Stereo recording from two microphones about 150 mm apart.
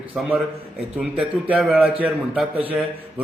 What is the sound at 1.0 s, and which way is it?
A man's voice, 10° right (ahead or behind).